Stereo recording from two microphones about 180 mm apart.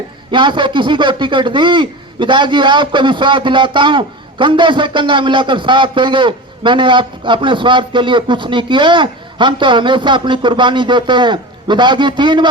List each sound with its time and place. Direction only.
0.3 s a man's voice: 25° right (ahead or behind)